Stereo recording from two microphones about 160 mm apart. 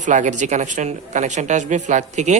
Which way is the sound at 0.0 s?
50° right (ahead or behind).